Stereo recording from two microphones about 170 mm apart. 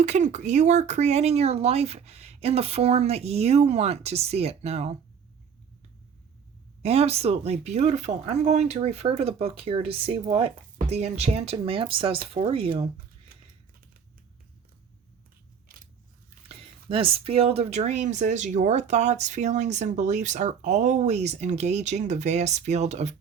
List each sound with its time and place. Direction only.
0.0 s speech: 45° right (ahead or behind)
6.8 s speech: 35° right (ahead or behind)
16.9 s speech: 35° right (ahead or behind)